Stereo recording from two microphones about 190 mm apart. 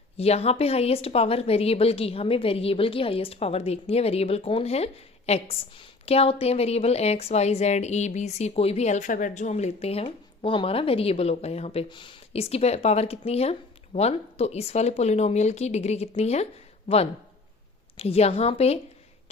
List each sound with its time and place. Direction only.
0.2 s a woman's voice: 30° left (ahead or behind)
17.9 s a woman's voice: 30° left (ahead or behind)